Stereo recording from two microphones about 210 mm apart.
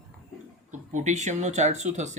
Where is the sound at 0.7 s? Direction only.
35° right (ahead or behind).